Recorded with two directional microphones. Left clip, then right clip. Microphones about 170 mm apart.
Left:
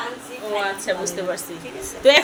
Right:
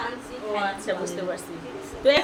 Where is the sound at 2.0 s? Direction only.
25° left (ahead or behind).